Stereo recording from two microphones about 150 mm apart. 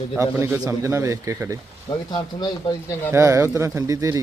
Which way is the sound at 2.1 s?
30° left (ahead or behind).